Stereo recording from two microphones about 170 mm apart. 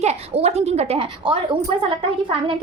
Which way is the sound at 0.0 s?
40° right (ahead or behind).